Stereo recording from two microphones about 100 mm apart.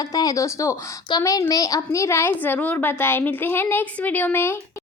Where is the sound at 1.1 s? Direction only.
50° left (ahead or behind).